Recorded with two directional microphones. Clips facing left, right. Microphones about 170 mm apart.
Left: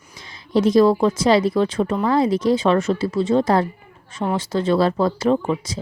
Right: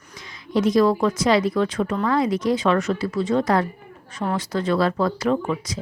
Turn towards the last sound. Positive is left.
turn(degrees=25)  # may be behind; listen again after turning